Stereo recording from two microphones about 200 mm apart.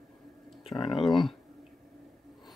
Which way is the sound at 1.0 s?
Centre (ahead or behind).